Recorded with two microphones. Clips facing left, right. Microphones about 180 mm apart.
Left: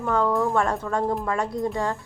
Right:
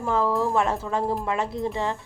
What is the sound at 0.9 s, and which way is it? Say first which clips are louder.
Speech: left 1 dB; 20° right (ahead or behind).